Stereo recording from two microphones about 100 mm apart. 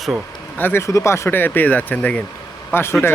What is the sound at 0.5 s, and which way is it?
Speech, 20° left (ahead or behind).